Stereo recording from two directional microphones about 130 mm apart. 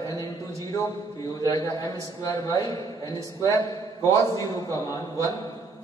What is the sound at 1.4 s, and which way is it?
A man's voice, 25° left (ahead or behind).